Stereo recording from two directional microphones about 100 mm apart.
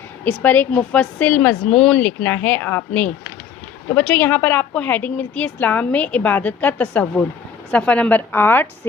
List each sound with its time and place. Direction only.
0.3 s a woman's voice: 20° left (ahead or behind)